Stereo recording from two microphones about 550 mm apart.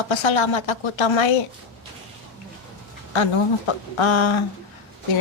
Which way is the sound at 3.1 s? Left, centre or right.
Left.